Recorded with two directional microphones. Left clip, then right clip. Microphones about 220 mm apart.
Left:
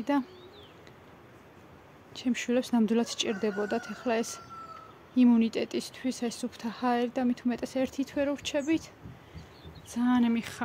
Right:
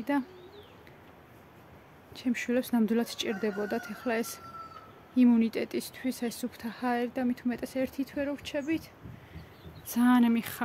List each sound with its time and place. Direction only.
0.1 s speech: 15° left (ahead or behind)
2.1 s speech: 5° left (ahead or behind); by 8.8 s 20° left (ahead or behind)
9.9 s speech: 15° right (ahead or behind)